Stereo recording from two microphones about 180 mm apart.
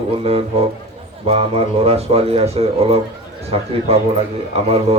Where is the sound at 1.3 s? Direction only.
35° right (ahead or behind).